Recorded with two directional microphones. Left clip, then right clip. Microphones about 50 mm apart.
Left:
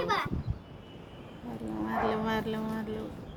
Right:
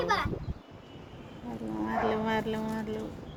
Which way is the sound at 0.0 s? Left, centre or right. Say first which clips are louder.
Right 1 dB; right.